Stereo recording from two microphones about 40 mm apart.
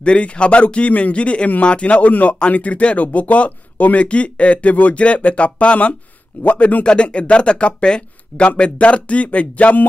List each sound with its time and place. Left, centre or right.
0.0 s speech: left